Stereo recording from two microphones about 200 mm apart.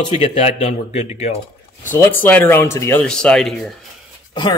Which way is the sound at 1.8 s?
10° left (ahead or behind).